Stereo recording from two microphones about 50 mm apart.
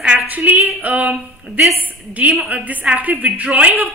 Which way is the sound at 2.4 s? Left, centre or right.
Right.